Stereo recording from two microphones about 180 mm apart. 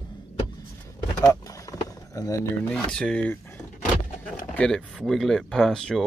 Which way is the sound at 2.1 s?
15° left (ahead or behind).